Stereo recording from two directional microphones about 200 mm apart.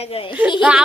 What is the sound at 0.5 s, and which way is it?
Speech, 5° right (ahead or behind).